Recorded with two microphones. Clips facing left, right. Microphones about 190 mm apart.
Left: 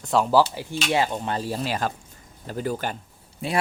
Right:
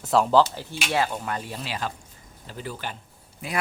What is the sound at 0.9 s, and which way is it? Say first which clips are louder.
Speech: left 2 dB; 20° left (ahead or behind).